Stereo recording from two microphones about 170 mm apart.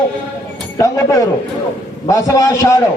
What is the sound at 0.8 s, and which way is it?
A man's voice, 20° left (ahead or behind).